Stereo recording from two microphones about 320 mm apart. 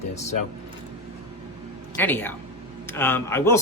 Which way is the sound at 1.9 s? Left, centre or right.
Centre.